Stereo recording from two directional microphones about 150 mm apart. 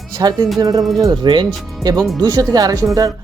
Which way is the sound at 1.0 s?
30° right (ahead or behind).